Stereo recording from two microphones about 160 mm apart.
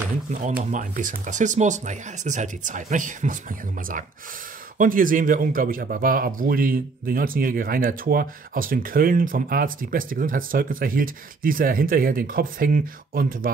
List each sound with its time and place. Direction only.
0.3 s speech: 50° right (ahead or behind)